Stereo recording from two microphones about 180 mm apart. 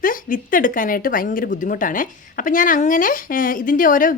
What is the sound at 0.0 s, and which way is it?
A woman's voice, 50° left (ahead or behind).